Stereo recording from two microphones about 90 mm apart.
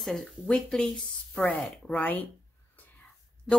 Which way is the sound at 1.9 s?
20° left (ahead or behind).